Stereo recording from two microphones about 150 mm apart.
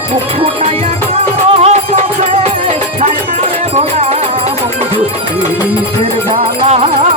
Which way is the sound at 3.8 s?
45° right (ahead or behind).